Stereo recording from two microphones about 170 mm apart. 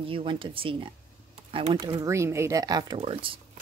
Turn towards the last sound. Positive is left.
turn(degrees=-30)  # may be behind; listen again after turning